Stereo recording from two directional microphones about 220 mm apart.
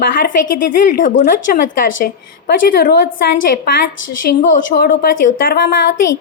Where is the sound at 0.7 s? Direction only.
35° left (ahead or behind).